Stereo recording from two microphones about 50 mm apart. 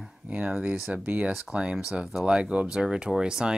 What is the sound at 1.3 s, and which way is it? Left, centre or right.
Speech, centre.